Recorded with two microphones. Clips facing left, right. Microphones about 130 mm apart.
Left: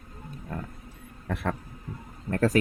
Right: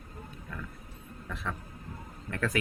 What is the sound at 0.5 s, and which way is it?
Speech, 45° left (ahead or behind).